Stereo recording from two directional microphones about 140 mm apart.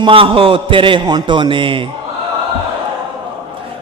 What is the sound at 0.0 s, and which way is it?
A man's voice, 40° right (ahead or behind).